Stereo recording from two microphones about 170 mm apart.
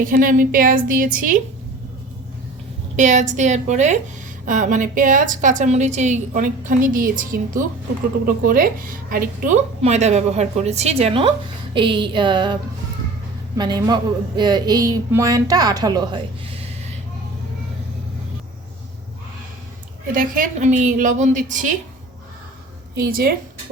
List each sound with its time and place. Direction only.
0.0 s a woman's voice: 50° right (ahead or behind)
2.9 s a woman's voice: 45° right (ahead or behind); by 12.5 s 25° right (ahead or behind)
13.6 s speech: 25° right (ahead or behind)
20.1 s a woman's voice: 50° right (ahead or behind)
23.0 s speech: 60° right (ahead or behind)